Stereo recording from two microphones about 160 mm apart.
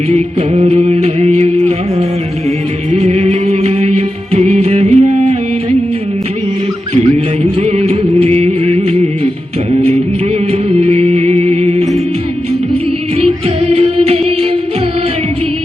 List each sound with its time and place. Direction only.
0.6 s music: 40° right (ahead or behind)
7.6 s music of bollywood: 40° right (ahead or behind)
10.8 s music: 40° right (ahead or behind)
13.1 s music: 40° right (ahead or behind)